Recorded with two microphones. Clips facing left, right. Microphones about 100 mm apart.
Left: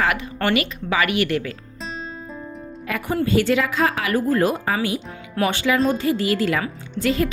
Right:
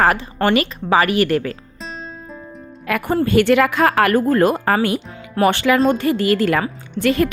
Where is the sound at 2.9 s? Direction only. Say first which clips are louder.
Right 4 dB; 60° right (ahead or behind).